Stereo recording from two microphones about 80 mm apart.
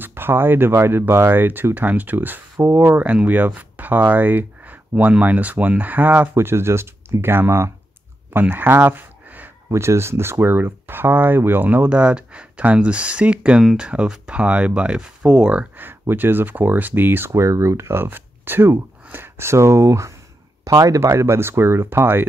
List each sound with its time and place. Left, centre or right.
0.0 s speech: right
8.3 s a sound: right
9.7 s speech: right; by 15.6 s centre
15.8 s speech: right
17.3 s speech: right